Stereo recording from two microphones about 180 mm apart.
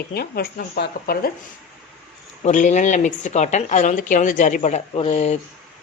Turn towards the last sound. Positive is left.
turn(degrees=35)  # may be behind; listen again after turning